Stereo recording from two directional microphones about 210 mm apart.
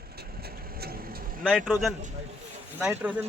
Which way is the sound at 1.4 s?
Centre (ahead or behind).